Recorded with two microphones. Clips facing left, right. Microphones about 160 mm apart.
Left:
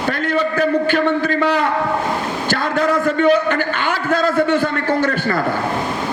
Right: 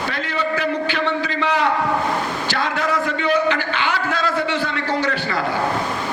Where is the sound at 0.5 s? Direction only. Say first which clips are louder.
Left 6 dB; 45° left (ahead or behind).